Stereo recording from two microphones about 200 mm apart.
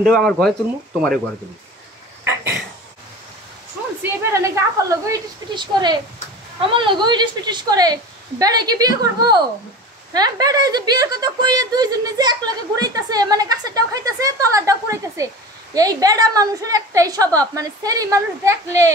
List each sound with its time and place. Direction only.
0.0 s speech: 5° left (ahead or behind)
2.2 s a sound: 10° right (ahead or behind)
4.0 s a woman's voice: 15° right (ahead or behind)